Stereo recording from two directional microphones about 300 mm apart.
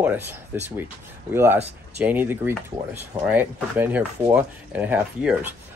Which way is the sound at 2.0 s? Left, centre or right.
Centre.